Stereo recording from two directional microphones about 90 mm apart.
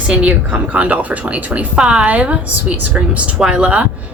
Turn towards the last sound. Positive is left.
turn(degrees=-10)  # may be behind; listen again after turning